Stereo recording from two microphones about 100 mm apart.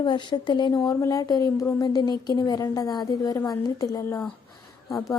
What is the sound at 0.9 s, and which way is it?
A woman's voice, 35° left (ahead or behind).